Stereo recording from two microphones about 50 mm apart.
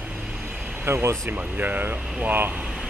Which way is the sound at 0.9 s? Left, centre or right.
Right.